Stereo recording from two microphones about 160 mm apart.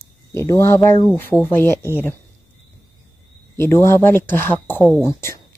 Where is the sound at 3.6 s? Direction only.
15° left (ahead or behind).